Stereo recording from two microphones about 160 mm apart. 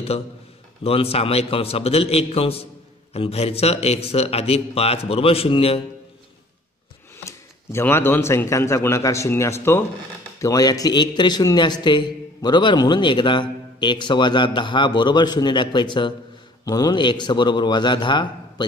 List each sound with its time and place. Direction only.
0.8 s a man's voice: 35° left (ahead or behind)
7.2 s a man's voice: 15° left (ahead or behind)